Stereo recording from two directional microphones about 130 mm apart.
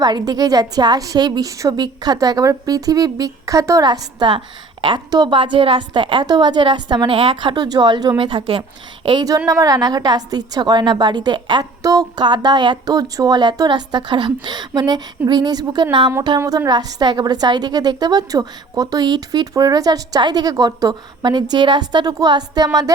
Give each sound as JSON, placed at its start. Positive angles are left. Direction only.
{"t": 0.0, "sound": "a woman's voice", "side_deg": -30}
{"t": 9.0, "sound": "a woman's voice", "side_deg": -30}